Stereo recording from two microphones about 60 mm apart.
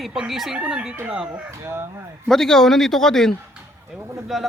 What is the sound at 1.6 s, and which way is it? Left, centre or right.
Speech, right.